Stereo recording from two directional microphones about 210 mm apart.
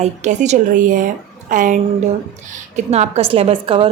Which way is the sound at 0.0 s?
35° right (ahead or behind).